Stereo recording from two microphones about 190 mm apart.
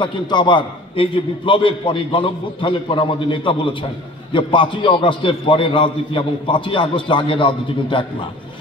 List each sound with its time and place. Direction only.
0.0 s a man's voice: 25° left (ahead or behind)